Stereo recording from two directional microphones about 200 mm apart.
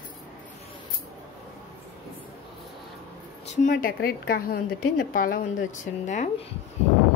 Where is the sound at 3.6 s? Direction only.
45° left (ahead or behind).